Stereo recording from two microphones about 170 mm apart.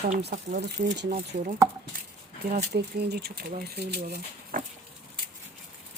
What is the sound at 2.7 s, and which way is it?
Speech, 75° right (ahead or behind).